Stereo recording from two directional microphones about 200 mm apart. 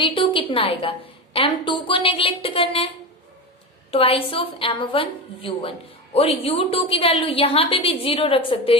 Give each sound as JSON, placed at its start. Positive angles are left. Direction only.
{"t": 0.0, "sound": "a woman's voice", "side_deg": 25}
{"t": 3.9, "sound": "a woman's voice", "side_deg": 30}